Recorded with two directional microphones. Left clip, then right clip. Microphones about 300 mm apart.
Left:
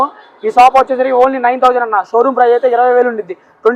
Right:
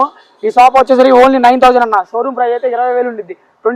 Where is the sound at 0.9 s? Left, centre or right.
Right.